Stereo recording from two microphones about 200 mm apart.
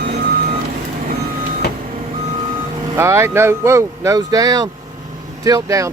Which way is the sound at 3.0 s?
10° right (ahead or behind).